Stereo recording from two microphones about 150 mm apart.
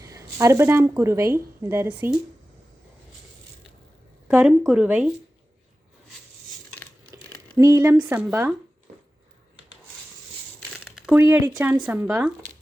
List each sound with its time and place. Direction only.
0.0 s speech: 20° right (ahead or behind)
4.3 s speech: 10° right (ahead or behind)
7.3 s a sound: 10° left (ahead or behind)
7.5 s speech: 25° right (ahead or behind)
7.8 s speech: 10° right (ahead or behind)
11.1 s speech: 15° right (ahead or behind)